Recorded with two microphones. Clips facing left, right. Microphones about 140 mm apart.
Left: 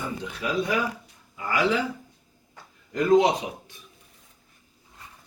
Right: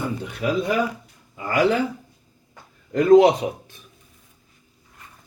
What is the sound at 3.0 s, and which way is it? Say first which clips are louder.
Speech: right 6 dB; 50° right (ahead or behind).